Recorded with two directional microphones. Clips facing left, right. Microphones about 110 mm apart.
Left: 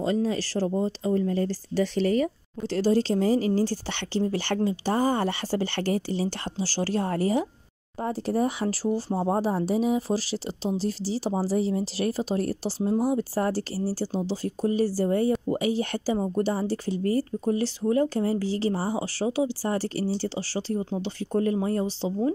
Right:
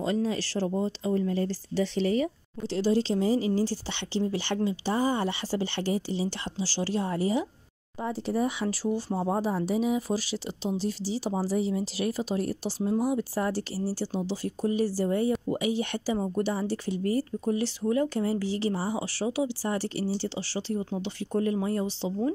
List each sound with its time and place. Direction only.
0.0 s speech: 35° left (ahead or behind)